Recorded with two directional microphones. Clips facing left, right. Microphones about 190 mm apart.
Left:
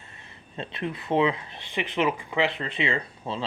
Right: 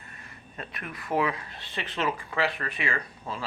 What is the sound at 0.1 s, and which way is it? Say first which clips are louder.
Speech: even; 25° left (ahead or behind).